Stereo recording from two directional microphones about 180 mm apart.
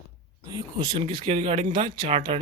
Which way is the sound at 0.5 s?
20° right (ahead or behind).